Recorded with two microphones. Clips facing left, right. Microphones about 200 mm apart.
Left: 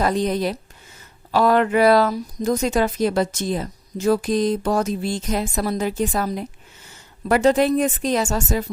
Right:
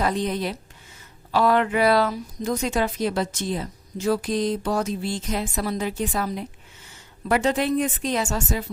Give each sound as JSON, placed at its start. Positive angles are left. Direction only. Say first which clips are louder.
{"t": 0.0, "sound": "speech", "louder": "left 4 dB", "side_deg": 40}